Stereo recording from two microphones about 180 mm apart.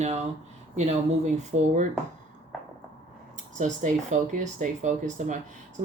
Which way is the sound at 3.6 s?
45° right (ahead or behind).